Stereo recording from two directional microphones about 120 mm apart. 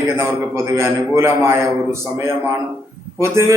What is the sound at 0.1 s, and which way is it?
A man's voice, 20° right (ahead or behind).